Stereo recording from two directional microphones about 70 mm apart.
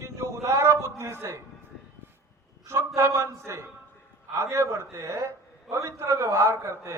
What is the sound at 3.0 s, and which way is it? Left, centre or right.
A man's voice, right.